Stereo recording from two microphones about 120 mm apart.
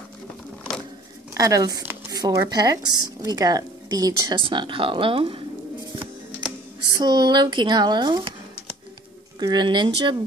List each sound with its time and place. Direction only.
1.3 s speech: 30° right (ahead or behind); by 5.4 s 50° right (ahead or behind)
7.0 s speech: 35° right (ahead or behind)
9.4 s speech: 35° right (ahead or behind)